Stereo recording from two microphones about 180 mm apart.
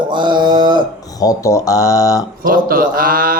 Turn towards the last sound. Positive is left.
turn(degrees=-55)  # may be behind; listen again after turning